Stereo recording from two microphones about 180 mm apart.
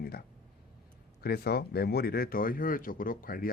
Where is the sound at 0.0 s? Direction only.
60° left (ahead or behind).